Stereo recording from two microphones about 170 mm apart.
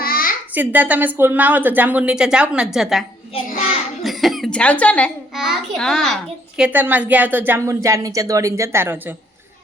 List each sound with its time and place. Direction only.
0.0 s a sound: 60° left (ahead or behind)
0.5 s a woman's voice: 10° right (ahead or behind)
4.0 s speech: centre (ahead or behind)
5.3 s a child's voice: 5° right (ahead or behind)
6.6 s a woman's voice: 10° right (ahead or behind)